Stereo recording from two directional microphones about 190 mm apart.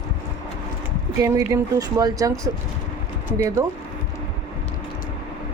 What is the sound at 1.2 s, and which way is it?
A woman's voice, 15° right (ahead or behind).